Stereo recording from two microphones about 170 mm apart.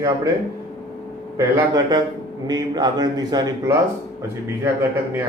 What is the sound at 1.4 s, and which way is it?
A man's voice, 20° right (ahead or behind).